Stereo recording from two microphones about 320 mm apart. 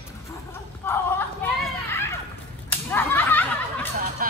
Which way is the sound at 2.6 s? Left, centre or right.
Centre.